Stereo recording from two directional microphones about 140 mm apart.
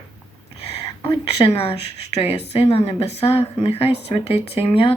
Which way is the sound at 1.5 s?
45° left (ahead or behind).